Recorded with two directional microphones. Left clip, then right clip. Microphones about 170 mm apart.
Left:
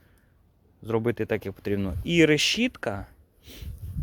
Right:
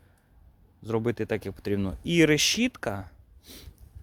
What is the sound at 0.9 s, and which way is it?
Speech, 5° left (ahead or behind).